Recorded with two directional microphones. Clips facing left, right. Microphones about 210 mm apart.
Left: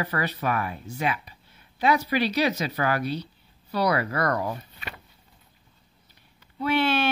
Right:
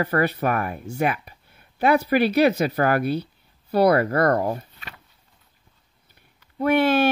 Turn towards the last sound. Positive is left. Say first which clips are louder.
# right 5 dB
turn(degrees=-45)  # may be behind; listen again after turning